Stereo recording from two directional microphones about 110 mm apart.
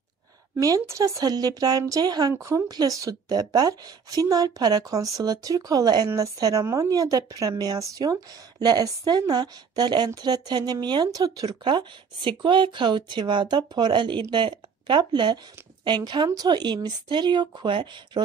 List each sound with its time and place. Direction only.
0.6 s a woman's voice: 30° right (ahead or behind); by 18.2 s 45° right (ahead or behind)